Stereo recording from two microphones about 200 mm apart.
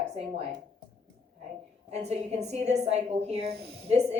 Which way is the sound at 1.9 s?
35° right (ahead or behind).